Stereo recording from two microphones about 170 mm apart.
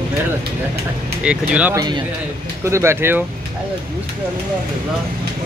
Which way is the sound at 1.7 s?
25° right (ahead or behind).